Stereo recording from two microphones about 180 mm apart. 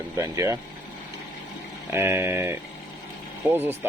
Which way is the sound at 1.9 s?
15° right (ahead or behind).